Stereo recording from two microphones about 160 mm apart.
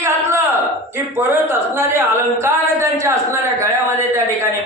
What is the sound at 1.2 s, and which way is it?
A man's voice, 15° right (ahead or behind).